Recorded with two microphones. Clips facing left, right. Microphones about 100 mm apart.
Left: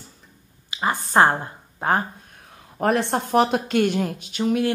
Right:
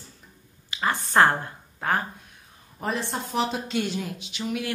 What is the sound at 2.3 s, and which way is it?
A woman's voice, 65° left (ahead or behind).